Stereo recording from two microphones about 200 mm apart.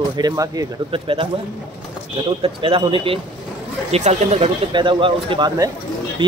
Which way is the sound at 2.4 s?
25° right (ahead or behind).